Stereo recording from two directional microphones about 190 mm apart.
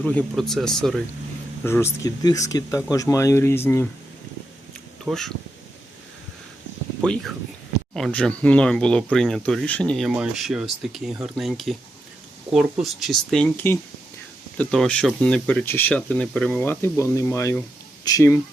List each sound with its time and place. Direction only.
0.0 s speech: 5° left (ahead or behind)
1.6 s speech: 15° left (ahead or behind)
5.0 s speech: centre (ahead or behind)
7.0 s speech: 5° left (ahead or behind)